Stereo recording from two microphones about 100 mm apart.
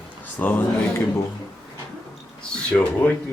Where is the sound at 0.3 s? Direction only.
20° left (ahead or behind).